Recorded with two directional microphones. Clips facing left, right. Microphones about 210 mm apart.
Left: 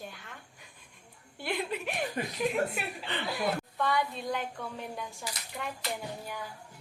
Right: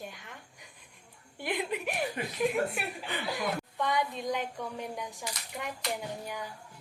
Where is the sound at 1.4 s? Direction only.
15° right (ahead or behind).